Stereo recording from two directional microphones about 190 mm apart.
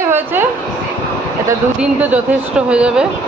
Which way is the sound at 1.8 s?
10° right (ahead or behind).